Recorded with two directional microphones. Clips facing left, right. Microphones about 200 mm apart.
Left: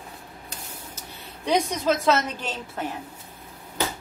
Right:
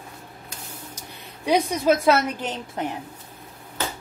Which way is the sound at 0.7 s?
10° right (ahead or behind).